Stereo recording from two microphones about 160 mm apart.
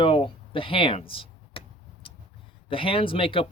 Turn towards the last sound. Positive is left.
turn(degrees=35)  # may be behind; listen again after turning